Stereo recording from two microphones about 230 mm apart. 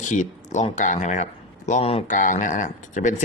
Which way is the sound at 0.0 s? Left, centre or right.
Left.